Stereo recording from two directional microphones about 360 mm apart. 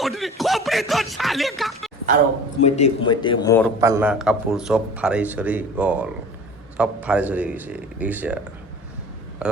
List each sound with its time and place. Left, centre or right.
0.0 s speech: centre
2.6 s speech: centre
3.8 s a man's voice: centre
9.4 s a man's voice: centre